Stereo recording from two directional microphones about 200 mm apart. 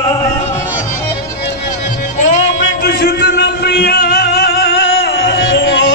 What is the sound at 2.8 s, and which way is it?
Music, 50° left (ahead or behind).